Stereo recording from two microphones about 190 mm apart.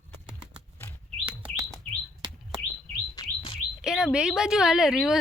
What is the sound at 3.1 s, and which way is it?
Chirp, 25° left (ahead or behind).